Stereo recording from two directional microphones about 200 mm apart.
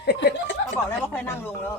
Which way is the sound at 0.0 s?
55° left (ahead or behind).